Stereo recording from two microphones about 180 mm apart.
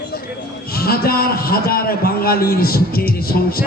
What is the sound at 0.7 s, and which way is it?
A man's voice, 55° left (ahead or behind).